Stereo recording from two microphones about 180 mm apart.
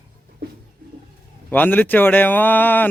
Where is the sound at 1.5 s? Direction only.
10° left (ahead or behind).